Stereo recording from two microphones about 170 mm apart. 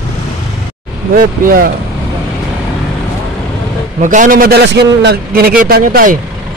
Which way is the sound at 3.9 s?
50° right (ahead or behind).